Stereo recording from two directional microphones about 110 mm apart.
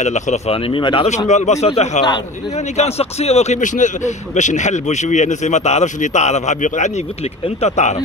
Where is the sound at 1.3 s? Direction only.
90° left.